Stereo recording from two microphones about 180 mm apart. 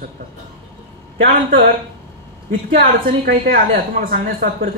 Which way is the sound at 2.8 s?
60° right (ahead or behind).